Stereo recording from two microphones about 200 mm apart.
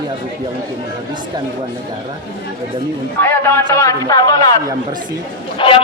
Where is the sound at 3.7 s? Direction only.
15° left (ahead or behind).